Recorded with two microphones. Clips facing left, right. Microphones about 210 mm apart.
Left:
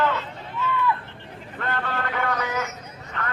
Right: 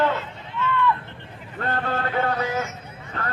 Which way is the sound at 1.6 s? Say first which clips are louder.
Right 3 dB; 35° right (ahead or behind).